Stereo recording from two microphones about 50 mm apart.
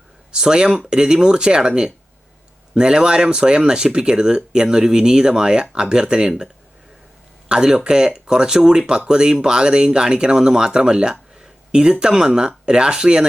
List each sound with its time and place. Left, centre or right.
0.3 s speech: centre